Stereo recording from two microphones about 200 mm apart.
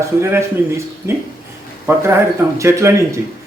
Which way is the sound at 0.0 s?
15° right (ahead or behind).